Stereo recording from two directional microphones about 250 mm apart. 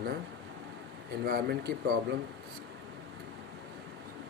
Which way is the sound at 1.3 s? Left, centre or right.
Right.